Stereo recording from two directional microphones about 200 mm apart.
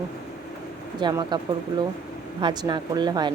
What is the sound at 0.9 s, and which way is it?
Speech, 20° right (ahead or behind).